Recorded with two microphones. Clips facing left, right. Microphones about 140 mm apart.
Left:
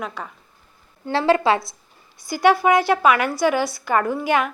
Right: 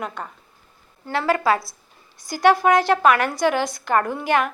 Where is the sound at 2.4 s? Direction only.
10° left (ahead or behind).